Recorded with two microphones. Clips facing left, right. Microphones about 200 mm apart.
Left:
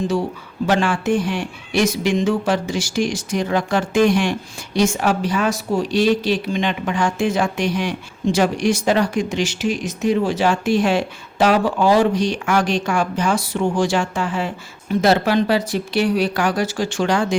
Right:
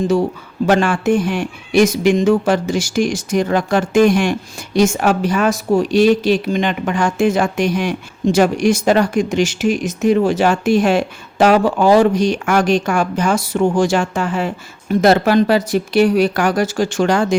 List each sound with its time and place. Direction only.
0.7 s speech: 45° right (ahead or behind)